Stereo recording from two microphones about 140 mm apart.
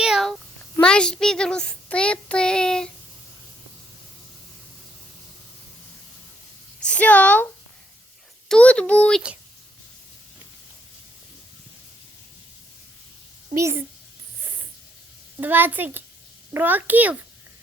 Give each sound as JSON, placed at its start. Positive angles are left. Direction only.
{"t": 0.0, "sound": "a sound", "side_deg": -5}
{"t": 0.8, "sound": "a child's voice", "side_deg": 5}
{"t": 6.8, "sound": "a woman's voice", "side_deg": 10}
{"t": 8.4, "sound": "a child's voice", "side_deg": 10}
{"t": 13.5, "sound": "speech", "side_deg": -20}
{"t": 15.4, "sound": "a woman's voice", "side_deg": -15}